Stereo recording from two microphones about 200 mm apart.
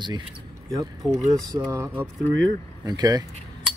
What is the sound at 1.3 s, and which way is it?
Speech, 15° right (ahead or behind).